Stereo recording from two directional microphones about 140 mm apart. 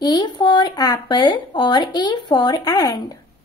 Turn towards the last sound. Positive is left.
turn(degrees=30)  # may be behind; listen again after turning